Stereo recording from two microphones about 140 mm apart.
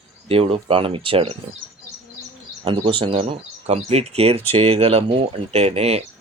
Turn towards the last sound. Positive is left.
turn(degrees=-45)  # may be behind; listen again after turning